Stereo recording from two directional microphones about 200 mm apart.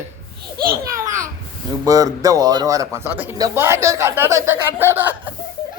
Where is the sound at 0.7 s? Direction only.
15° right (ahead or behind).